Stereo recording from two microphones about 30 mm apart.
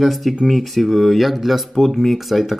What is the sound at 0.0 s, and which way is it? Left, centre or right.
Speech, centre.